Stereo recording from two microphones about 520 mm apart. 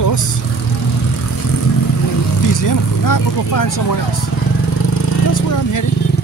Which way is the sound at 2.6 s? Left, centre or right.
Left.